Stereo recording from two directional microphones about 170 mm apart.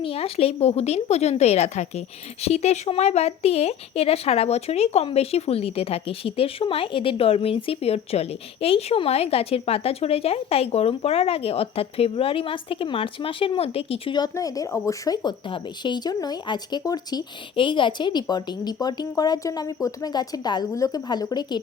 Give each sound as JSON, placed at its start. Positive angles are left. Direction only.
{"t": 0.0, "sound": "speech", "side_deg": 35}